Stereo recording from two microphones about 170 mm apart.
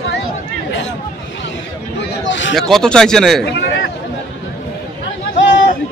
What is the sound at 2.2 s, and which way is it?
Speech, 90° left.